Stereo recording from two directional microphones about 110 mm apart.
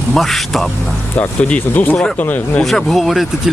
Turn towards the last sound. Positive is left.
turn(degrees=0)  # may be behind; listen again after turning